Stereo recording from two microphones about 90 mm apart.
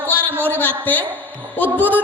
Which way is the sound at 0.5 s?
20° left (ahead or behind).